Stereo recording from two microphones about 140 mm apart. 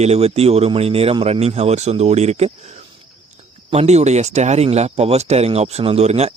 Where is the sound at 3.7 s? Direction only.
50° right (ahead or behind).